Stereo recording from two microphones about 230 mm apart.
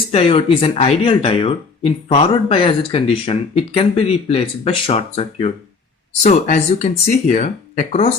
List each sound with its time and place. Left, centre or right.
0.1 s speech: left